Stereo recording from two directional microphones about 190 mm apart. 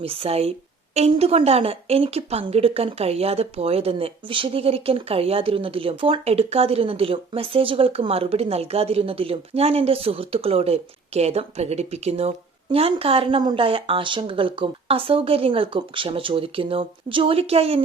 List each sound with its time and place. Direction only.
0.0 s speech: 30° right (ahead or behind)